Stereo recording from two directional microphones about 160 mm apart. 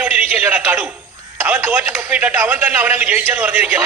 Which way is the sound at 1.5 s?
10° right (ahead or behind).